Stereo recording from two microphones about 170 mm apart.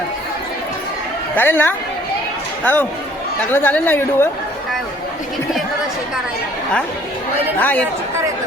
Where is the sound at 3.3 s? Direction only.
10° left (ahead or behind).